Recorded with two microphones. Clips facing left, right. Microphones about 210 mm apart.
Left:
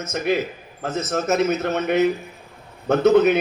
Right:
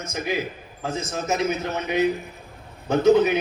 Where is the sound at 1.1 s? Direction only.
60° left (ahead or behind).